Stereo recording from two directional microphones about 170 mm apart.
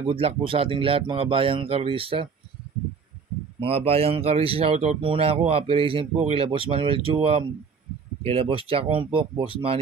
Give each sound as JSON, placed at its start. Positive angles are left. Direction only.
{"t": 0.1, "sound": "speech", "side_deg": -35}
{"t": 3.6, "sound": "speech", "side_deg": -35}